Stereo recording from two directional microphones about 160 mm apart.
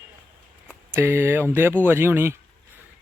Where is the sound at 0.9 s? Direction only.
15° right (ahead or behind).